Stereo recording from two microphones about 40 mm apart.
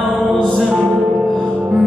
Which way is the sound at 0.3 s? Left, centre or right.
Centre.